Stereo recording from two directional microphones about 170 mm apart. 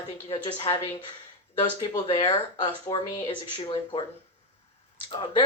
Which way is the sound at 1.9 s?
35° left (ahead or behind).